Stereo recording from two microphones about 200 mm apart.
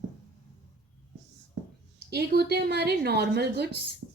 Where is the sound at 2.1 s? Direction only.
55° right (ahead or behind).